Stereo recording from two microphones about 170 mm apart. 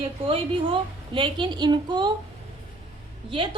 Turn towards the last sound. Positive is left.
turn(degrees=-30)  # may be behind; listen again after turning